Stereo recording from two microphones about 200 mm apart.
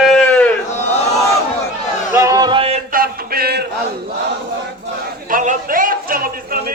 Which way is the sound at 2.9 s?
50° right (ahead or behind).